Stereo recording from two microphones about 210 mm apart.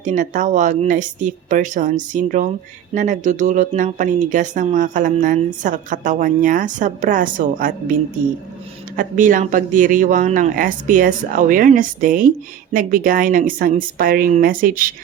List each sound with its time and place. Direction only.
0.0 s speech: 35° right (ahead or behind)
9.0 s speech: 40° right (ahead or behind)